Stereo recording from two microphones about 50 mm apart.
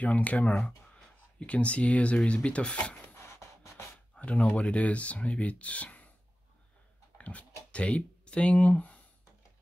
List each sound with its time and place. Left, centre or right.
0.0 s speech: left
3.2 s a sound: left
4.2 s speech: left
7.2 s speech: left